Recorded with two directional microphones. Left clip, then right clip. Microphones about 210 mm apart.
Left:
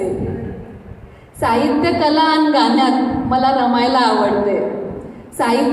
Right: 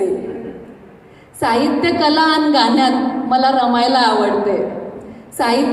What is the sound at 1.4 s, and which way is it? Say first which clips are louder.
A woman's voice: even; 40° right (ahead or behind).